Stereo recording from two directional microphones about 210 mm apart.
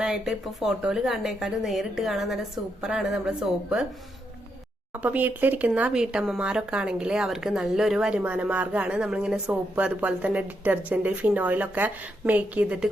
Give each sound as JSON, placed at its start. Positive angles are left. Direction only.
{"t": 0.0, "sound": "speech", "side_deg": -5}
{"t": 4.9, "sound": "speech", "side_deg": -5}